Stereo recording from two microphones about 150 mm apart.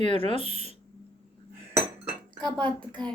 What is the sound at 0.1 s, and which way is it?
Speech, 35° left (ahead or behind).